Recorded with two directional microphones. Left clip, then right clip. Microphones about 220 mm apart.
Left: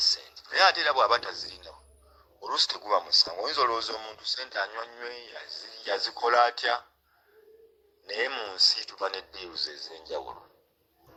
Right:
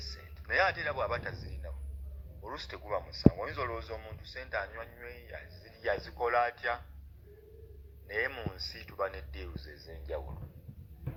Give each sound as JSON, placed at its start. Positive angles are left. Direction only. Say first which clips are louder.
{"t": 0.5, "sound": "a man's voice", "louder": "left 8 dB", "side_deg": 40}
{"t": 2.5, "sound": "speech", "louder": "left 12 dB", "side_deg": 40}
{"t": 8.1, "sound": "a man's voice", "louder": "left 4 dB", "side_deg": 50}